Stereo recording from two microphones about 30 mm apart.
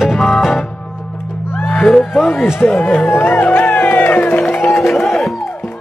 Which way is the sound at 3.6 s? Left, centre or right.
Left.